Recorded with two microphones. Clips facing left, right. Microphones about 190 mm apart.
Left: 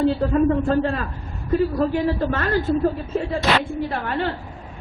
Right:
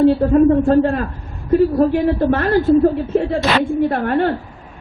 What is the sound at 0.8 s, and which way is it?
Speech, 50° right (ahead or behind).